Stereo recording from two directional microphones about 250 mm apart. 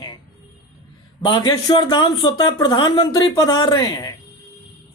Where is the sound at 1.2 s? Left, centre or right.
Centre.